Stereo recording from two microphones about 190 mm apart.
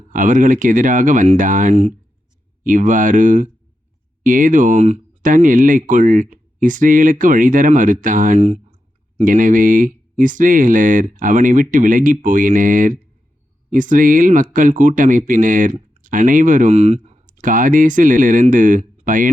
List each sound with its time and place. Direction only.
0.1 s speech: 45° right (ahead or behind)